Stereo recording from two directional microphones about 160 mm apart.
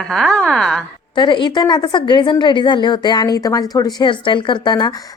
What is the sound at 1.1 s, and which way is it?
A woman's voice, 30° left (ahead or behind).